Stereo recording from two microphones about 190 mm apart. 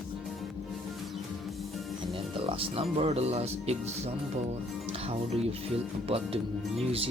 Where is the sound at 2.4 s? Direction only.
30° right (ahead or behind).